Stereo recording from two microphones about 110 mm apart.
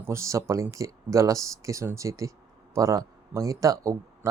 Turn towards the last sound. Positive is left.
turn(degrees=-30)  # may be behind; listen again after turning